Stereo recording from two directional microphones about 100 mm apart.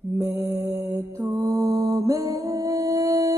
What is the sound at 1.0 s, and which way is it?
Music, 25° right (ahead or behind).